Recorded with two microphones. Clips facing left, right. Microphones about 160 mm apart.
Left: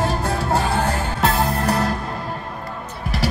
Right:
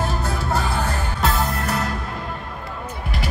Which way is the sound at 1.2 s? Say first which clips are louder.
Left 3 dB; 30° left (ahead or behind).